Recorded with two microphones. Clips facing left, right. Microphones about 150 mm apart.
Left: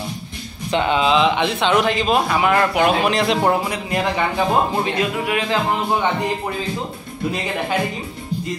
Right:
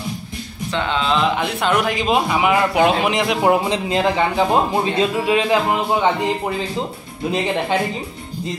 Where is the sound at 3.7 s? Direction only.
20° right (ahead or behind).